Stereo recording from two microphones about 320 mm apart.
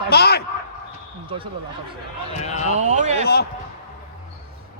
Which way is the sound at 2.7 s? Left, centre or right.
Right.